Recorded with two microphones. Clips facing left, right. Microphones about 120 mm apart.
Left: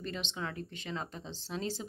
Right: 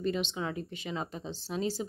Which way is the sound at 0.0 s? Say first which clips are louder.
Right 7 dB; 10° right (ahead or behind).